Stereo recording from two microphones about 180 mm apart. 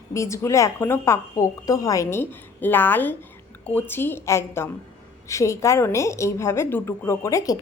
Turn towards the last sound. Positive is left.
turn(degrees=20)  # may be behind; listen again after turning